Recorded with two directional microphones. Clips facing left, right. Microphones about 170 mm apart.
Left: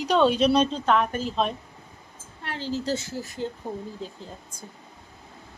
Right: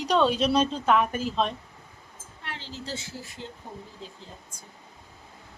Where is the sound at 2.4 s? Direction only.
40° left (ahead or behind).